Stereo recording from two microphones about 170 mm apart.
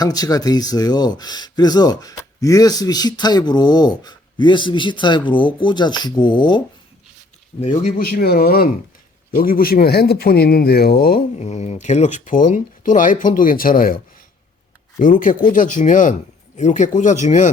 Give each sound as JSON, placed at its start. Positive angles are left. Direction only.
{"t": 0.0, "sound": "speech", "side_deg": 20}
{"t": 7.6, "sound": "speech", "side_deg": 40}
{"t": 8.1, "sound": "a man's voice", "side_deg": 65}
{"t": 11.3, "sound": "speech", "side_deg": 40}